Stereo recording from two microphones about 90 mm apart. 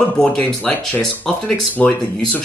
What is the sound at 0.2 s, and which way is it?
Speech, 15° left (ahead or behind).